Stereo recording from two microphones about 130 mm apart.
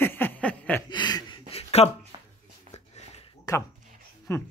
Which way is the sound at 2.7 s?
60° left (ahead or behind).